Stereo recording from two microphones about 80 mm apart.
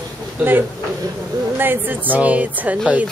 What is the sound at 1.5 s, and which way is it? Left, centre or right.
A woman's voice, right.